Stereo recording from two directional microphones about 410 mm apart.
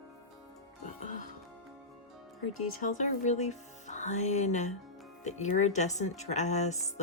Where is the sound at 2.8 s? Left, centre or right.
Centre.